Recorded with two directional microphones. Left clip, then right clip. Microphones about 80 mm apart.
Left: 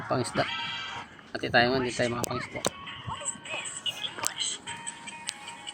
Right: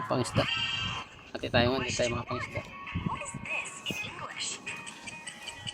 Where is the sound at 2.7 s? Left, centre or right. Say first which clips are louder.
Even; centre.